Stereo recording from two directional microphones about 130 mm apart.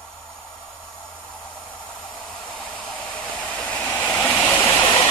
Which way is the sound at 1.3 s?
10° left (ahead or behind).